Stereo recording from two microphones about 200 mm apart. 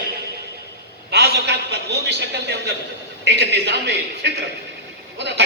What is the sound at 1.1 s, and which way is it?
A man's voice, 55° right (ahead or behind).